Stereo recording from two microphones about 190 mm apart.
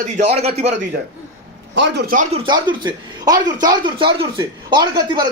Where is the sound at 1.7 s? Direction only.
65° right (ahead or behind).